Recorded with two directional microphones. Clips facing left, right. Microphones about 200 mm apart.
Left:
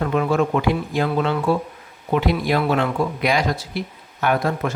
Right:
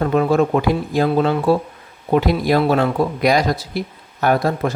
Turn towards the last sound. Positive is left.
turn(degrees=-35)  # may be behind; listen again after turning